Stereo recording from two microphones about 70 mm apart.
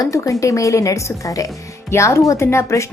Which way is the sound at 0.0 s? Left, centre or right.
Left.